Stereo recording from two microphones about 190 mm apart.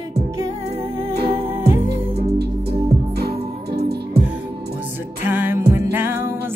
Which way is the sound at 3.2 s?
55° right (ahead or behind).